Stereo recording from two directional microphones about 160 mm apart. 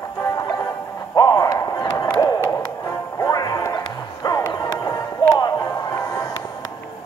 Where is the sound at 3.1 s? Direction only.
20° left (ahead or behind).